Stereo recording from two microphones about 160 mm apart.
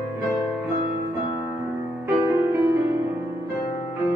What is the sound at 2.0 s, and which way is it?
Music, 15° right (ahead or behind).